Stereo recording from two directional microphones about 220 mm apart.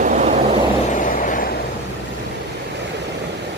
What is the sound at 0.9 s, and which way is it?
Vehicle, 35° left (ahead or behind).